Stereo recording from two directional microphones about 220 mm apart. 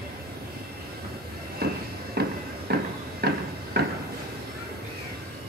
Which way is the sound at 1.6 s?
45° right (ahead or behind).